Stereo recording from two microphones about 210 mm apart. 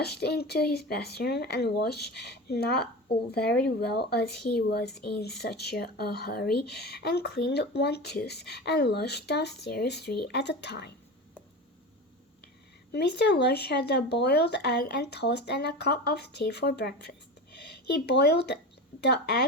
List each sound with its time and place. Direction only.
0.0 s speech: 50° left (ahead or behind)
12.9 s speech: 55° left (ahead or behind)